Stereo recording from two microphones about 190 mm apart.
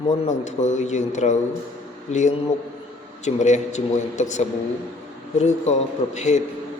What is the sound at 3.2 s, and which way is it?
Speech, 40° left (ahead or behind).